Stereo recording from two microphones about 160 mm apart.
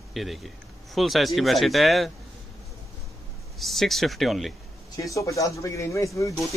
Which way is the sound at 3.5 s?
Centre (ahead or behind).